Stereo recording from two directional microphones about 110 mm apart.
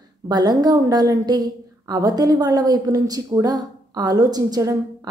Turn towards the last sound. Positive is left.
turn(degrees=-35)  # may be behind; listen again after turning